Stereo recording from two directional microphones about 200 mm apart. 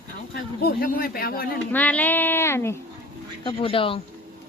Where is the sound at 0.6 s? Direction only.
50° left (ahead or behind).